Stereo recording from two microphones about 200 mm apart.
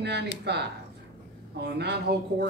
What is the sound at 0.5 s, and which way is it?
Speech, 55° right (ahead or behind).